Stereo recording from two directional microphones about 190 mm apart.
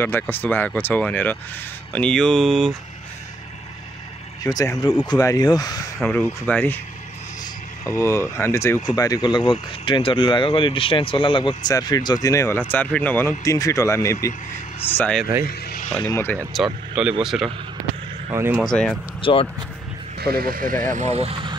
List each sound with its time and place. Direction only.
0.0 s speech: 10° left (ahead or behind)
4.5 s speech: 15° left (ahead or behind)
5.9 s speech: 5° left (ahead or behind)
7.8 s speech: 15° left (ahead or behind)
15.4 s vehicle: 50° left (ahead or behind)
16.0 s speech: 15° left (ahead or behind)
16.5 s speech: centre (ahead or behind)
18.3 s speech: 10° right (ahead or behind)
18.6 s speech: 5° left (ahead or behind)
19.2 s speech: 25° left (ahead or behind)
20.2 s speech: 55° right (ahead or behind); by 21.5 s 30° right (ahead or behind)